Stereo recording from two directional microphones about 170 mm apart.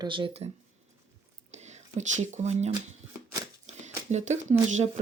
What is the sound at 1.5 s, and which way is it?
Speech, 40° right (ahead or behind).